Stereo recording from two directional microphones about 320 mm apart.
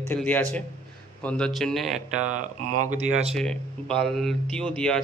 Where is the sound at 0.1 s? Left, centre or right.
Centre.